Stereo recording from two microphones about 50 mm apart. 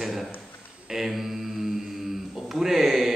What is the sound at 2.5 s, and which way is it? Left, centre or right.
Speech, centre.